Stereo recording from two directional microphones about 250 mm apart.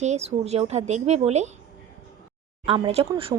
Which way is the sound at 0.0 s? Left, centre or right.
Right.